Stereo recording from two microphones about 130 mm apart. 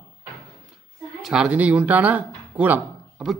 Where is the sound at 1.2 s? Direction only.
5° right (ahead or behind).